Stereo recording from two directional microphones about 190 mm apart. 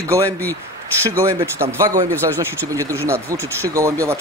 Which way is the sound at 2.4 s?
15° right (ahead or behind).